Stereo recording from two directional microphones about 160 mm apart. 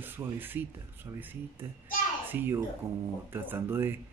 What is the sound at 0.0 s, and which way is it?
Speech, 10° right (ahead or behind).